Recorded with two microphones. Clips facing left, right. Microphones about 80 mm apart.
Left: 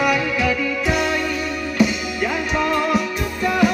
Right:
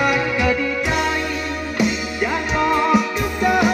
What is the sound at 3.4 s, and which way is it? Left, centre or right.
Music, centre.